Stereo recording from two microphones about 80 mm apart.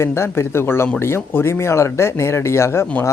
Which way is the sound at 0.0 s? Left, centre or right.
Left.